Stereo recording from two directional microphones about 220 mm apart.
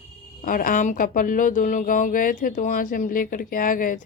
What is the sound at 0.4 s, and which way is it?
Speech, 40° left (ahead or behind).